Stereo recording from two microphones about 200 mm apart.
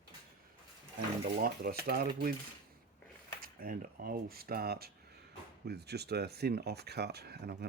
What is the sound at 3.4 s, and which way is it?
Speech, 45° right (ahead or behind).